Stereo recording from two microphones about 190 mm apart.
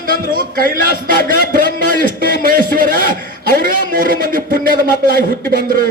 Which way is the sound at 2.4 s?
50° right (ahead or behind).